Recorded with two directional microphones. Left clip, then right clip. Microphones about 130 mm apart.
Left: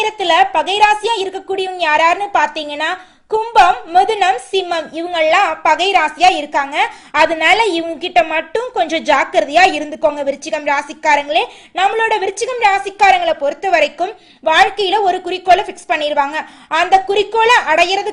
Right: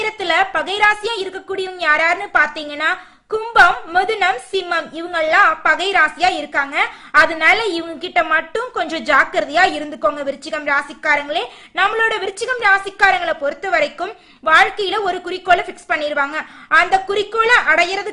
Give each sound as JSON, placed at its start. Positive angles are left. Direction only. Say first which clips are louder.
{"t": 0.0, "sound": "a woman's voice", "louder": "left 5 dB", "side_deg": 20}